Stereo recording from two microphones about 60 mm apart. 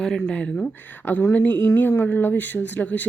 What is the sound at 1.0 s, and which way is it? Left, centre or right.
Speech, left.